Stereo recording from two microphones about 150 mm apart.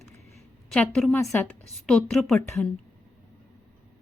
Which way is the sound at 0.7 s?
5° left (ahead or behind).